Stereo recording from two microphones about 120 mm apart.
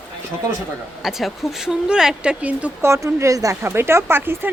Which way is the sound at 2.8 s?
25° right (ahead or behind).